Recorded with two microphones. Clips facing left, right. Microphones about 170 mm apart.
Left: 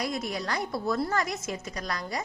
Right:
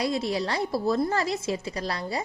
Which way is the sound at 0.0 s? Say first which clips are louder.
Right 5 dB; 30° right (ahead or behind).